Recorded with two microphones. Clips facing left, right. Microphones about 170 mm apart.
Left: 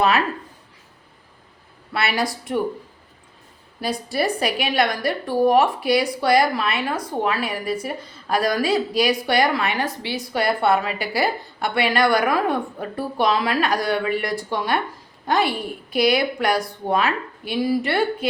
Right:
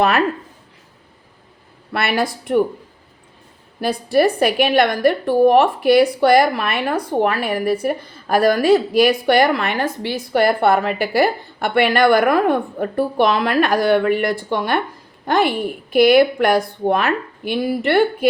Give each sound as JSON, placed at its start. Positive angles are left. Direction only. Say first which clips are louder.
{"t": 1.9, "sound": "a woman's voice", "louder": "right 3 dB", "side_deg": -55}
{"t": 3.8, "sound": "a woman's voice", "louder": "right 7 dB", "side_deg": -55}